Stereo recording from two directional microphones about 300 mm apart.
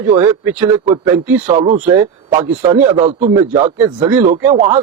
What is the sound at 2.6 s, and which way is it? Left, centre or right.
Speech, centre.